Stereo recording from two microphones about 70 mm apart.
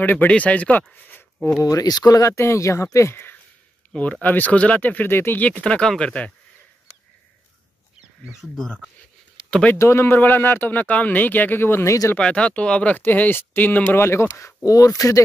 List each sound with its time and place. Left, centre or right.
0.0 s speech: left
0.9 s a sound: left
1.6 s speech: left
2.2 s speech: left
3.9 s speech: centre
5.4 s speech: centre
8.5 s speech: centre
9.8 s speech: left
12.2 s speech: centre
13.0 s speech: left
13.9 s speech: left